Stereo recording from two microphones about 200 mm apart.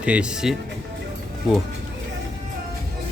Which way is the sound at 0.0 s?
5° right (ahead or behind).